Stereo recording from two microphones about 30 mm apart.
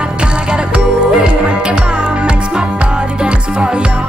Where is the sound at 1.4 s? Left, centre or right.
Right.